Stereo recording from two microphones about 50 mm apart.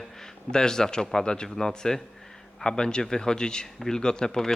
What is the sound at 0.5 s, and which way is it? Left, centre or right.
Speech, centre.